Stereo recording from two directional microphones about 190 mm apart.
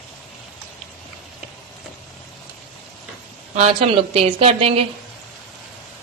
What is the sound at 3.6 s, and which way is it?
A woman's voice, 30° right (ahead or behind).